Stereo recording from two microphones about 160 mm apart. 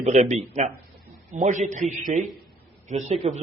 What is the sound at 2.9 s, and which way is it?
Speech, 45° right (ahead or behind).